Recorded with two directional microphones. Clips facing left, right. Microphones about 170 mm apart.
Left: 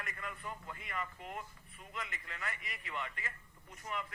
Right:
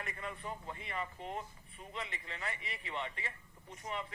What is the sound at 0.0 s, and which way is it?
Speech, 30° right (ahead or behind).